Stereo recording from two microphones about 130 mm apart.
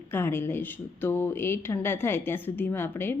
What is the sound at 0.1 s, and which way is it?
A woman's voice, 20° left (ahead or behind).